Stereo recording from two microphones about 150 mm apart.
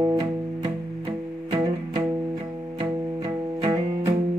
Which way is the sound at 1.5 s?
30° right (ahead or behind).